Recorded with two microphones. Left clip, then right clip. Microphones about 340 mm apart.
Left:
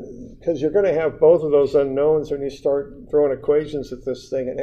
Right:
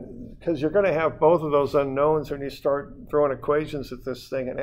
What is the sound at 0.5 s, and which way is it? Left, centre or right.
Speech, right.